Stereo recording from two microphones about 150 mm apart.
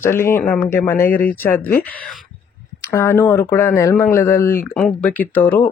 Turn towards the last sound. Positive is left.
turn(degrees=10)  # may be behind; listen again after turning